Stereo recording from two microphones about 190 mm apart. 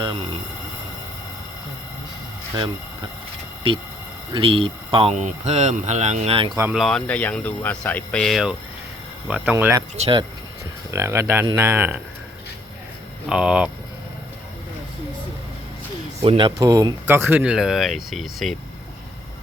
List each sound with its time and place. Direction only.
0.0 s speech: 25° right (ahead or behind)
4.4 s speech: 30° right (ahead or behind)
6.7 s speech: 5° left (ahead or behind)
10.0 s speech: 25° right (ahead or behind)
10.9 s speech: 15° right (ahead or behind)
13.2 s speech: 5° right (ahead or behind)
16.2 s speech: 25° right (ahead or behind); by 18.5 s centre (ahead or behind)